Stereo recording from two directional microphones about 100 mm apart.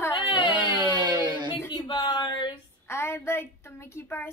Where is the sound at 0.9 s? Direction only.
50° right (ahead or behind).